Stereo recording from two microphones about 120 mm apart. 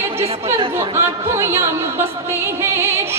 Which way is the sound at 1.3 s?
25° right (ahead or behind).